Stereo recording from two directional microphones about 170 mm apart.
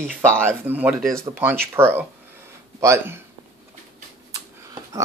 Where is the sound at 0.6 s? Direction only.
10° right (ahead or behind).